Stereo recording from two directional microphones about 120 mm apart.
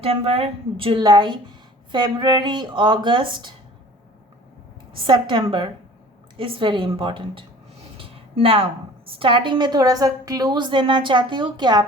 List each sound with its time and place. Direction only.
0.0 s a woman's voice: 55° right (ahead or behind)
5.0 s a woman's voice: 40° right (ahead or behind)